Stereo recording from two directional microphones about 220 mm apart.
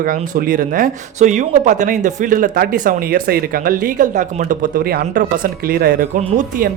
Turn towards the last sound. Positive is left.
turn(degrees=-40)  # may be behind; listen again after turning